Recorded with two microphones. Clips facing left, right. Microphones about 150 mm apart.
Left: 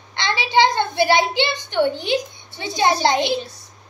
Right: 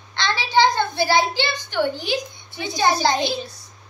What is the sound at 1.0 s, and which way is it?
A child's voice, 20° left (ahead or behind).